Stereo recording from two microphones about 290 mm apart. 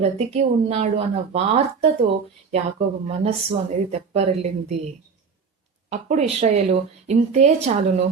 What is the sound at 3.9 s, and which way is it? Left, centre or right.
Speech, right.